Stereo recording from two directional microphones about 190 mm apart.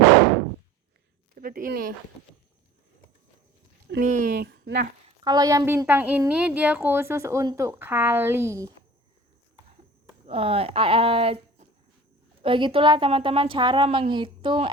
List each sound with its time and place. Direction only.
1.4 s speech: 45° right (ahead or behind)
4.0 s speech: 40° right (ahead or behind)
4.4 s speech: 70° right (ahead or behind)
5.0 s a woman's voice: 20° right (ahead or behind)
10.2 s a woman's voice: 30° right (ahead or behind)